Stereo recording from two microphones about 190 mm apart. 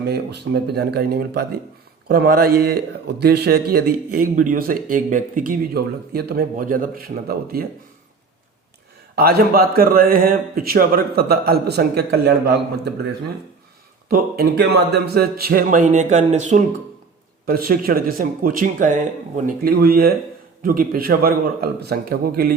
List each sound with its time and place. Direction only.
0.0 s a man's voice: 60° right (ahead or behind)
9.1 s a man's voice: 55° right (ahead or behind)
14.1 s a man's voice: 55° right (ahead or behind); by 16.6 s 40° right (ahead or behind)
17.4 s a man's voice: 50° right (ahead or behind)